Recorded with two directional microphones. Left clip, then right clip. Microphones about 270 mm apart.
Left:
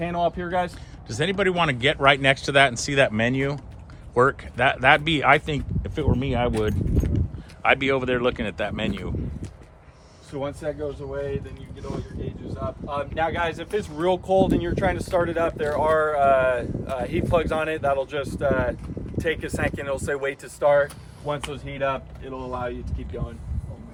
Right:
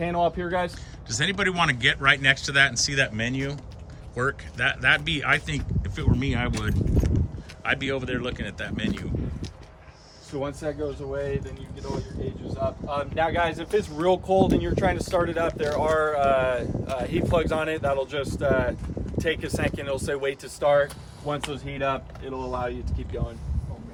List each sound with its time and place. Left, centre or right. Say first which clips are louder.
0.0 s speech: even; centre
7.6 s speech: left 6 dB; centre
10.3 s speech: left 1 dB; centre
11.8 s speech: right 1 dB; centre
12.2 s speech: right 4 dB; centre